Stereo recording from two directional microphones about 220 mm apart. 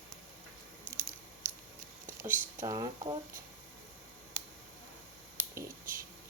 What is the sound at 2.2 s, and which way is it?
Speech, 15° right (ahead or behind).